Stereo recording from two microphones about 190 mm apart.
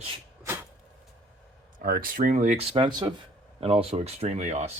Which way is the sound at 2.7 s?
25° right (ahead or behind).